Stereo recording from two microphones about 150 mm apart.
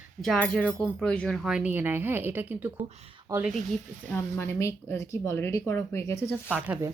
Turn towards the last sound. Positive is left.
turn(degrees=-10)  # may be behind; listen again after turning